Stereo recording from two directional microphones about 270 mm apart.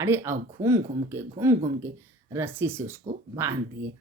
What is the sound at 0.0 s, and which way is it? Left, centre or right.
Speech, centre.